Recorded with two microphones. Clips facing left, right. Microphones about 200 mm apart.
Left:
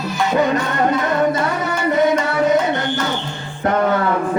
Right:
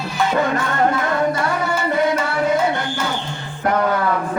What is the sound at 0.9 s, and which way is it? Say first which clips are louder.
Chant: left 2 dB; 20° left (ahead or behind).